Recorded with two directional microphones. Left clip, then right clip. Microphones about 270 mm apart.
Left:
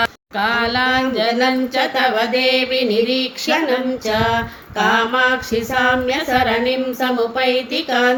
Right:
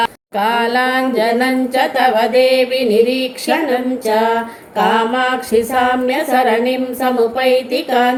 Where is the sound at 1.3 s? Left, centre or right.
Centre.